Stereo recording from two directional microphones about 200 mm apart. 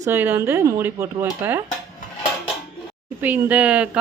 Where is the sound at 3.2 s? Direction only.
10° right (ahead or behind).